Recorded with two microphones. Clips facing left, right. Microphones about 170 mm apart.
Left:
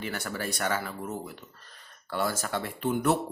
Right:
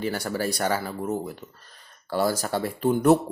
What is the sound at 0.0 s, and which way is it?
Speech, 35° right (ahead or behind).